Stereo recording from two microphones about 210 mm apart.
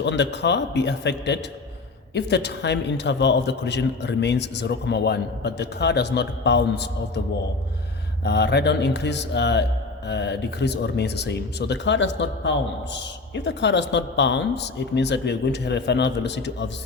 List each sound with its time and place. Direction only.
0.0 s speech: 55° left (ahead or behind)
8.2 s speech: 55° left (ahead or behind)